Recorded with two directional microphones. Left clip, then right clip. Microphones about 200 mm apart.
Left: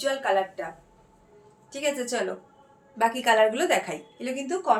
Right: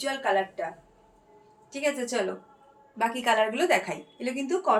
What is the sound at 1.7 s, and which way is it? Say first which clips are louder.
A woman's voice: left 1 dB; 15° left (ahead or behind).